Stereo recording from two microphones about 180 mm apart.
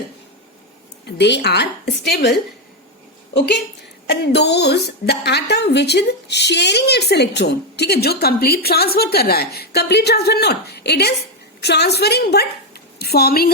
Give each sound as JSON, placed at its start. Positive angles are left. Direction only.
{"t": 1.0, "sound": "a woman's voice", "side_deg": 70}
{"t": 3.3, "sound": "a woman's voice", "side_deg": 65}